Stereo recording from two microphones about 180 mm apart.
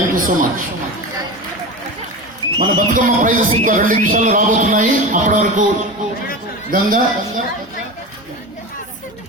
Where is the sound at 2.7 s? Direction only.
50° right (ahead or behind).